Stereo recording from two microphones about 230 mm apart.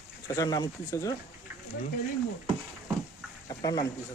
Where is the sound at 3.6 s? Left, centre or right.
Centre.